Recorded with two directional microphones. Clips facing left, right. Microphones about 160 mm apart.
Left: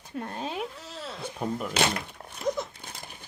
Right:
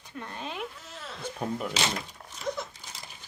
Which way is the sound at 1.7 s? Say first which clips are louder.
Left 4 dB; 55° left (ahead or behind).